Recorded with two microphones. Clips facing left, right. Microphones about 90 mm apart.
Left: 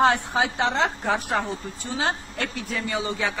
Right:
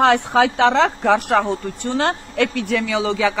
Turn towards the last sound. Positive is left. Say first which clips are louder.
# right 7 dB
turn(degrees=-90)